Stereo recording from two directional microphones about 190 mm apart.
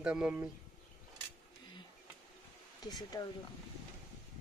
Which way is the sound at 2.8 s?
20° left (ahead or behind).